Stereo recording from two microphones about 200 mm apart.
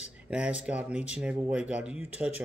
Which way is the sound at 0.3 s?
5° right (ahead or behind).